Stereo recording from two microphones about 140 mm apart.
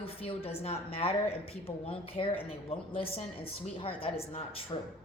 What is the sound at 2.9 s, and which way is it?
A woman's voice, 45° left (ahead or behind).